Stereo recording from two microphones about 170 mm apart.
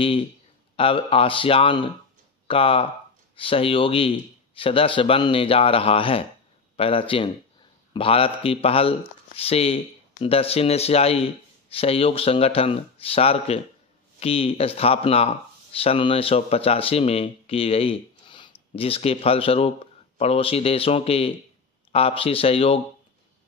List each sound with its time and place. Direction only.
0.7 s speech: 35° left (ahead or behind)